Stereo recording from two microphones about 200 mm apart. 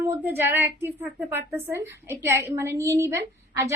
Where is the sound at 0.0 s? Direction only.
10° right (ahead or behind).